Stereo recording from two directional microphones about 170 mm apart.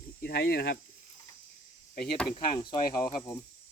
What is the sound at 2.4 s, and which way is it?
Speech, 25° left (ahead or behind).